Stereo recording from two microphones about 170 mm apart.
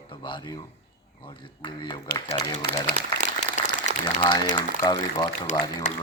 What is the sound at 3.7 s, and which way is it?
Applause, 45° left (ahead or behind).